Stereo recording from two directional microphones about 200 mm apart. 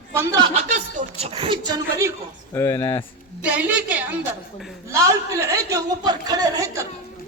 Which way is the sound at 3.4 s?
5° right (ahead or behind).